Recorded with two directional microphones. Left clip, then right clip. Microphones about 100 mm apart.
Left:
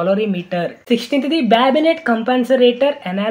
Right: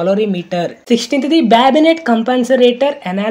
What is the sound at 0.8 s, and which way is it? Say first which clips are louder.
Speech: right 3 dB; 60° right (ahead or behind).